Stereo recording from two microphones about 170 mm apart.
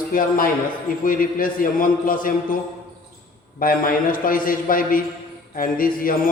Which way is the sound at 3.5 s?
55° left (ahead or behind).